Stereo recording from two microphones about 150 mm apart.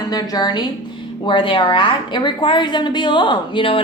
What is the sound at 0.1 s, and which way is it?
A woman's voice, 25° left (ahead or behind).